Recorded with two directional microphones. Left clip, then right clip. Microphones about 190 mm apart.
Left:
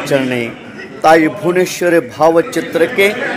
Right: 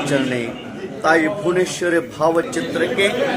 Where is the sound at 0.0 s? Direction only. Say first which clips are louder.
Left 5 dB; 35° left (ahead or behind).